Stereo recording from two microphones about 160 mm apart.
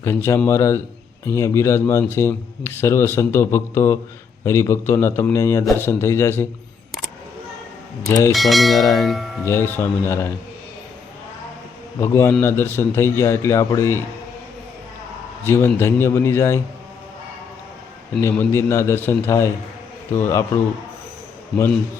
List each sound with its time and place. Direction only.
0.0 s speech: 15° left (ahead or behind)
8.0 s speech: 20° left (ahead or behind)
8.3 s bell: centre (ahead or behind)
9.4 s speech: 15° left (ahead or behind)
11.9 s speech: 15° left (ahead or behind)
15.4 s speech: 15° left (ahead or behind)
18.2 s speech: 15° left (ahead or behind)